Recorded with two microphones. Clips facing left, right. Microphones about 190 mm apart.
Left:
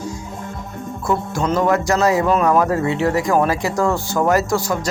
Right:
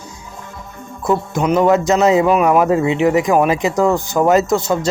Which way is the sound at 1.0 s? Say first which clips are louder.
Right 4 dB; 20° right (ahead or behind).